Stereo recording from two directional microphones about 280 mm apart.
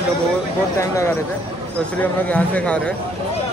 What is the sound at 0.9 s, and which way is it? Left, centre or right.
Speech, centre.